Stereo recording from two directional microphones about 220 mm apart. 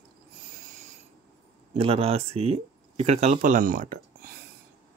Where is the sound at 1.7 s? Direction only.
25° right (ahead or behind).